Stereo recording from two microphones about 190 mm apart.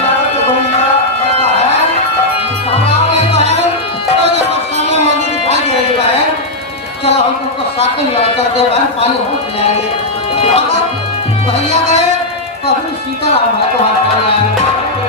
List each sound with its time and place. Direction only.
7.8 s speech: 30° left (ahead or behind)
10.3 s music: 30° left (ahead or behind)